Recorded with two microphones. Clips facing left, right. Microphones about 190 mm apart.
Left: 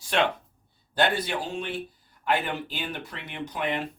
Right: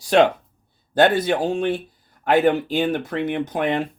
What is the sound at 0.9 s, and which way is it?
Speech, 45° right (ahead or behind).